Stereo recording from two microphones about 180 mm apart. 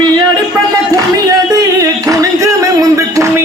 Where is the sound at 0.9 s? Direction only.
20° right (ahead or behind).